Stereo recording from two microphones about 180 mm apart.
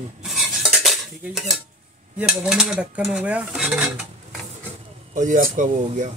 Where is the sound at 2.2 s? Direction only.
10° right (ahead or behind).